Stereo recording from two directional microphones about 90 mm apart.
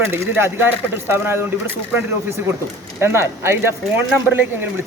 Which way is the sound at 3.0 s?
30° right (ahead or behind).